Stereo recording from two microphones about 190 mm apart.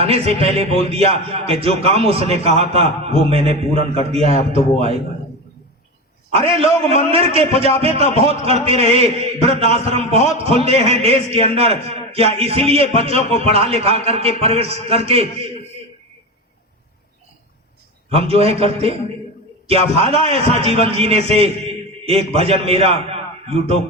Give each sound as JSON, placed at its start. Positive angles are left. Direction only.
{"t": 0.0, "sound": "a man's voice", "side_deg": -30}
{"t": 6.3, "sound": "a man's voice", "side_deg": -30}
{"t": 18.1, "sound": "a man's voice", "side_deg": -30}